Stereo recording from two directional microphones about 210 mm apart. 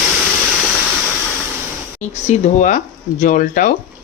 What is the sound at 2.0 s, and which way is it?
Speech, 35° left (ahead or behind).